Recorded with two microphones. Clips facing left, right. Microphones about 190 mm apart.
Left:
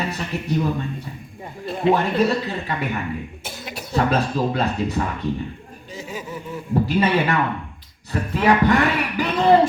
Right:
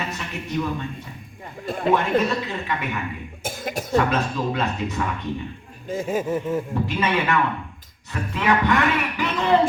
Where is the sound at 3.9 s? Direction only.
35° left (ahead or behind).